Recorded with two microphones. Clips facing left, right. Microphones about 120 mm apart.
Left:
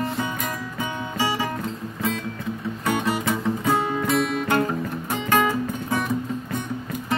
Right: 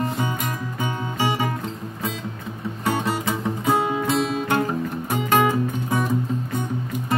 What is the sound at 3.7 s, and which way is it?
Music, 15° right (ahead or behind).